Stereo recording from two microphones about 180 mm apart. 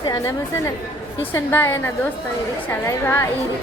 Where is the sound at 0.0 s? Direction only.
25° left (ahead or behind).